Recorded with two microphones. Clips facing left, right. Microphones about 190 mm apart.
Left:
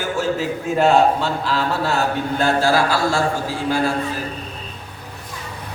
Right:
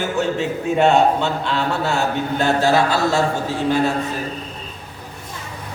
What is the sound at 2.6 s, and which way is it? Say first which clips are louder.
Speech: right 1 dB; 20° right (ahead or behind).